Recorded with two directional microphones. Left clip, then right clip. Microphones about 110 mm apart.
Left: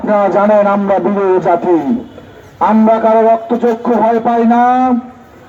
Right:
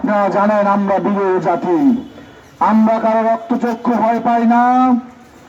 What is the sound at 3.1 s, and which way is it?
A man's voice, 35° right (ahead or behind).